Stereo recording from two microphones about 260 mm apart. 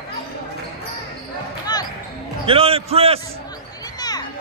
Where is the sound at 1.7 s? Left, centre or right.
Centre.